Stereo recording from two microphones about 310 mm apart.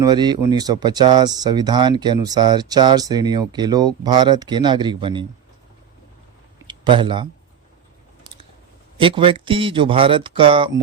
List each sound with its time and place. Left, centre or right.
0.0 s speech: centre
6.7 s speech: centre
9.0 s speech: centre